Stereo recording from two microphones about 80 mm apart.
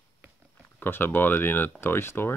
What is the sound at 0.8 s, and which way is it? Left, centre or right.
Speech, left.